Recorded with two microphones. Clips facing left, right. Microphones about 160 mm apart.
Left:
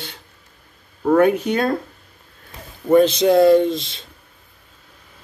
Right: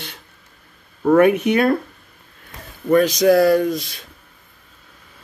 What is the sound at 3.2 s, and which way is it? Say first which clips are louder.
Speech: left 1 dB; 25° left (ahead or behind).